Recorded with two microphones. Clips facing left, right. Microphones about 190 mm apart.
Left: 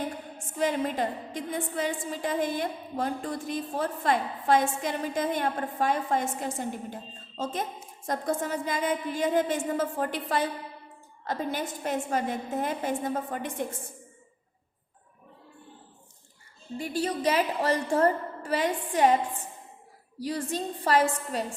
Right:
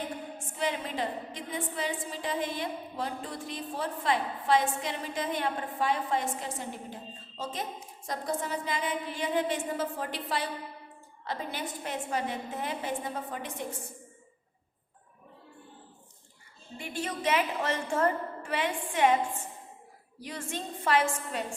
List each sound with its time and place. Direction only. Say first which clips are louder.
0.3 s a woman's voice: left 6 dB; 45° left (ahead or behind)
16.7 s a woman's voice: left 6 dB; 35° left (ahead or behind)